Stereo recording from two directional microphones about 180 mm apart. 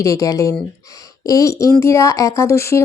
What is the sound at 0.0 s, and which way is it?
A woman's voice, 20° left (ahead or behind).